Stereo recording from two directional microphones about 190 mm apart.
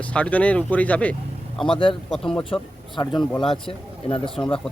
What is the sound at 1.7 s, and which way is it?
Speech, 25° left (ahead or behind).